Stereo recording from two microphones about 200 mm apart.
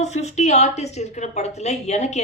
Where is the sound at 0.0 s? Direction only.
35° left (ahead or behind).